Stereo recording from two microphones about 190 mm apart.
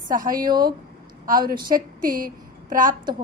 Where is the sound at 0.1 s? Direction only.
45° right (ahead or behind).